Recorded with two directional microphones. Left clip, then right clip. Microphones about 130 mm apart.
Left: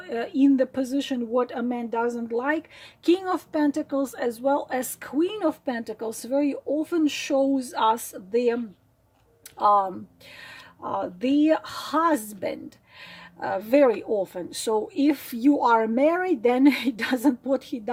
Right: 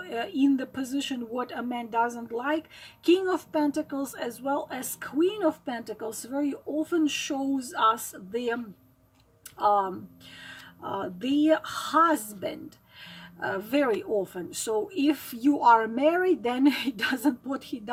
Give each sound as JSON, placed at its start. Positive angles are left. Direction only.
{"t": 0.0, "sound": "speech", "side_deg": 50}
{"t": 9.6, "sound": "speech", "side_deg": 45}